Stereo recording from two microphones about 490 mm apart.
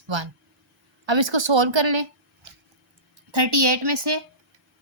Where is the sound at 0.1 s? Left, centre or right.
Right.